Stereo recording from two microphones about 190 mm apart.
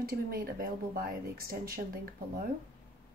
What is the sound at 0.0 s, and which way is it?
Speech, 50° right (ahead or behind).